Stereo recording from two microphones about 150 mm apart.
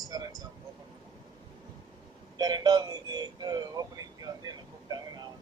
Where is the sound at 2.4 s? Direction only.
25° right (ahead or behind).